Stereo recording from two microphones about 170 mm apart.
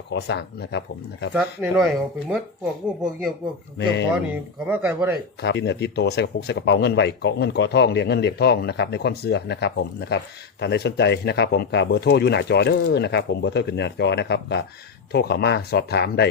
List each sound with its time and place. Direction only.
0.1 s speech: 85° left
1.3 s speech: 5° right (ahead or behind)
3.8 s speech: 90° left
4.6 s speech: 10° right (ahead or behind)
5.4 s speech: 90° left
15.1 s speech: 70° left (ahead or behind)